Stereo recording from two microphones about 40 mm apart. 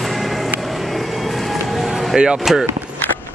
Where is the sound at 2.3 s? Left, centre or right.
Centre.